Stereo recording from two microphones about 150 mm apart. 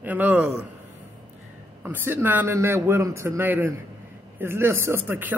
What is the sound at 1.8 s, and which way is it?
Speech, 15° right (ahead or behind).